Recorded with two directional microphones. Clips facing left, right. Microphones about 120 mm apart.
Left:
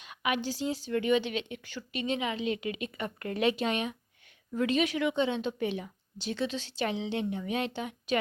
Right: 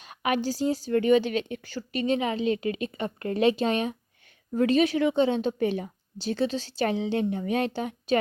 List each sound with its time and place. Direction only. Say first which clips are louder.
0.0 s speech: right 5 dB; 40° right (ahead or behind)